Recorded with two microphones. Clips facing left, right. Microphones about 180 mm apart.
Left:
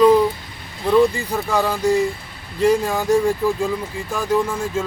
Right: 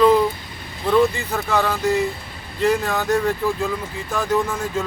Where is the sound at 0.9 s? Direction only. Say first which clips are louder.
Left 2 dB; 10° left (ahead or behind).